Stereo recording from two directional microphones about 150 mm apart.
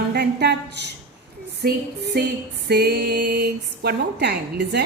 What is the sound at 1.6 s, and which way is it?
A woman's voice, 90° right.